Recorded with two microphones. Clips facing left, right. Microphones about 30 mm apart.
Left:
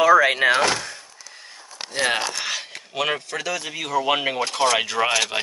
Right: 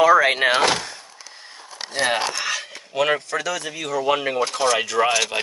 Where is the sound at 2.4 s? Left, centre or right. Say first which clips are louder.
Right 2 dB; centre.